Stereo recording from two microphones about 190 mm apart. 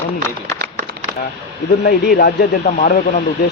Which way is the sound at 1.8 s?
55° left (ahead or behind).